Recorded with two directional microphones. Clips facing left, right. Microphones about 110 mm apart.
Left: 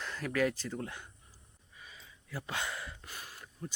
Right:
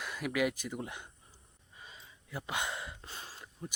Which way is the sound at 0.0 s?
10° right (ahead or behind).